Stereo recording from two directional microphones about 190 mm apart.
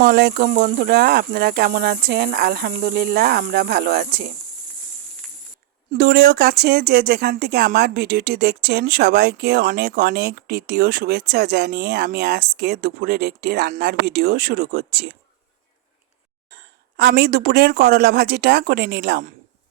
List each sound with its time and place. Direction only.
0.0 s speech: 55° right (ahead or behind)
6.0 s speech: 60° right (ahead or behind)
17.0 s speech: 55° right (ahead or behind)